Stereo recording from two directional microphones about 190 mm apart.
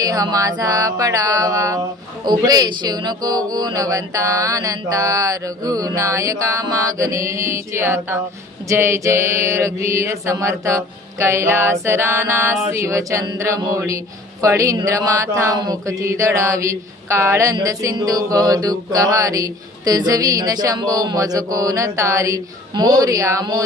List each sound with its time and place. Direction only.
0.0 s mantra: 20° right (ahead or behind)